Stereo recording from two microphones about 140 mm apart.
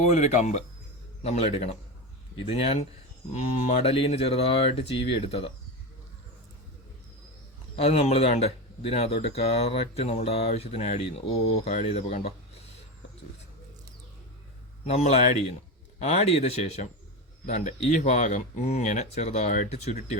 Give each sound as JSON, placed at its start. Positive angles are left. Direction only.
{"t": 0.0, "sound": "speech", "side_deg": 55}
{"t": 7.8, "sound": "speech", "side_deg": 45}
{"t": 14.8, "sound": "speech", "side_deg": 50}